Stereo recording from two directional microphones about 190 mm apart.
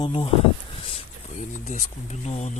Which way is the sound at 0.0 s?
25° left (ahead or behind).